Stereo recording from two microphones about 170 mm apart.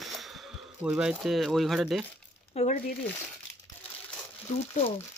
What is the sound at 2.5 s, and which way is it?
Speech, 45° left (ahead or behind).